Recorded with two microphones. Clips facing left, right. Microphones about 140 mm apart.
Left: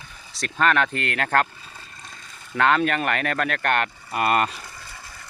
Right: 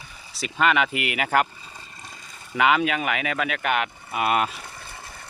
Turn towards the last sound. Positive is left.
turn(degrees=-25)  # may be behind; listen again after turning